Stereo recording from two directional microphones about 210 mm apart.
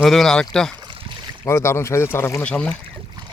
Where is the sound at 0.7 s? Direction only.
25° right (ahead or behind).